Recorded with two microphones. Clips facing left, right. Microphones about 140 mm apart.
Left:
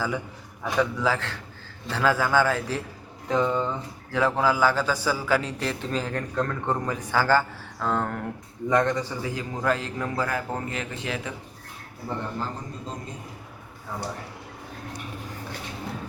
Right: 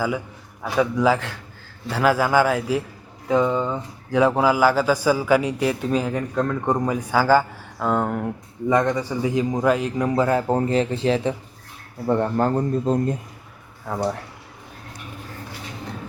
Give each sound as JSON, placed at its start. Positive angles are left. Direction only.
{"t": 0.6, "sound": "a man's voice", "side_deg": -10}
{"t": 12.0, "sound": "a man's voice", "side_deg": -60}